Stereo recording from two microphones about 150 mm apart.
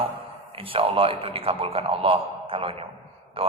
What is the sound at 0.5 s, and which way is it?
A man's voice, 35° right (ahead or behind).